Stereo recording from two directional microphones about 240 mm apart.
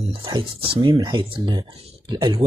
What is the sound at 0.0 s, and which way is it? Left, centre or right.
Speech, right.